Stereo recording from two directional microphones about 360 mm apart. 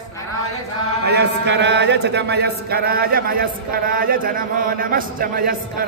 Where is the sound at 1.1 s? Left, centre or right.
Right.